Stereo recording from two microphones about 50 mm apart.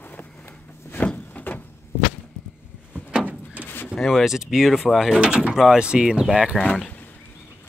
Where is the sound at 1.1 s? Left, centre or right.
Left.